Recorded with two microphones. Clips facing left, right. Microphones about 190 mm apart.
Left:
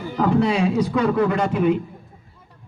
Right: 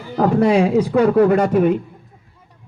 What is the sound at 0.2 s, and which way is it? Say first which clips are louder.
A man's voice: right 4 dB; 55° right (ahead or behind).